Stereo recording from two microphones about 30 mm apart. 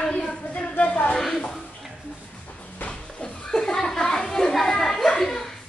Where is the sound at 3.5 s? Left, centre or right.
Centre.